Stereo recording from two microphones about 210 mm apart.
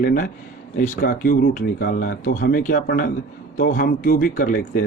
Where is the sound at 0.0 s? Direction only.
40° left (ahead or behind).